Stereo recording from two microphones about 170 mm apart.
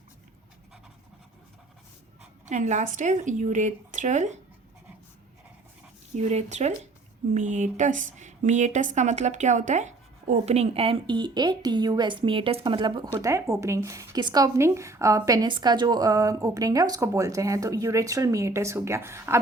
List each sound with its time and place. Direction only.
2.5 s speech: 45° right (ahead or behind)
6.2 s a woman's voice: 40° right (ahead or behind); by 19.4 s 15° right (ahead or behind)